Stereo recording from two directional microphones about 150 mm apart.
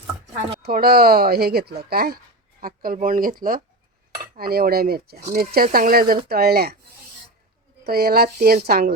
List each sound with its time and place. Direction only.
0.6 s speech: 85° right
2.6 s speech: 75° right (ahead or behind)
4.4 s speech: 90° right
7.9 s speech: 90° right